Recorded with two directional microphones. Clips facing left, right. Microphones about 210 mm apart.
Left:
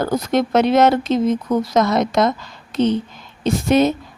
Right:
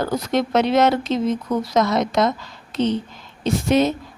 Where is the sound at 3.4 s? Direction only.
50° left (ahead or behind).